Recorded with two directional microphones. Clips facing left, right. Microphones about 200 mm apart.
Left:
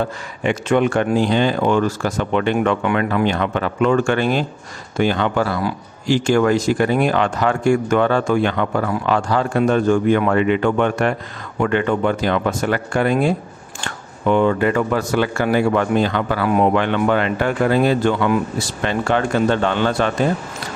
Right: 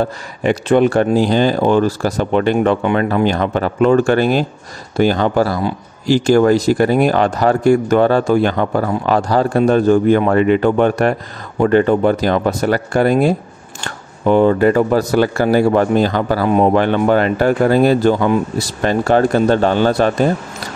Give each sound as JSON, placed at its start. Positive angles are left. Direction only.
{"t": 0.0, "sound": "a man's voice", "side_deg": -35}